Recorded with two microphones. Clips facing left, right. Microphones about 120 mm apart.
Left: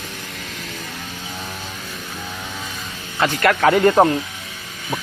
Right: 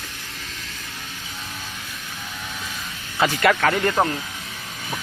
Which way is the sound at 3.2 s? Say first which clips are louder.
Left 1 dB; 5° right (ahead or behind).